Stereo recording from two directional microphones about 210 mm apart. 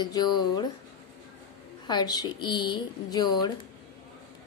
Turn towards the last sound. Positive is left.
turn(degrees=20)  # may be behind; listen again after turning